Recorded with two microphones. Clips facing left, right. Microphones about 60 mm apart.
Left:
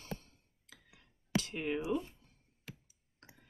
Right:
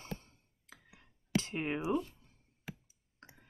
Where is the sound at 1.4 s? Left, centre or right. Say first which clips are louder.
Even; right.